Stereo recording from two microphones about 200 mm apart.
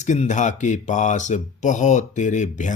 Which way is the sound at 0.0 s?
35° left (ahead or behind).